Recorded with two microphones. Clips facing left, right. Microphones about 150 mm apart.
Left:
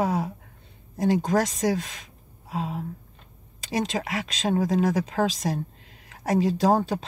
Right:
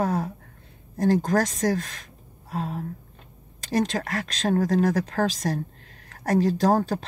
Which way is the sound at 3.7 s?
Centre (ahead or behind).